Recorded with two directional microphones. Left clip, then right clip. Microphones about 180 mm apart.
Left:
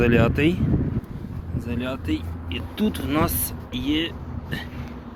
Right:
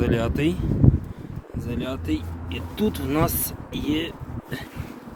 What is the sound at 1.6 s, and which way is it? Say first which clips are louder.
Speech: left 1 dB; 10° right (ahead or behind).